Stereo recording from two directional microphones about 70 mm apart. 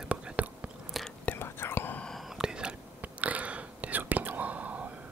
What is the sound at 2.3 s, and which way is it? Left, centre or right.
Whispering, centre.